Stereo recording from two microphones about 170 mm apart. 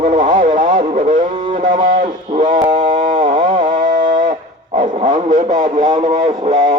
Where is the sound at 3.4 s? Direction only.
50° right (ahead or behind).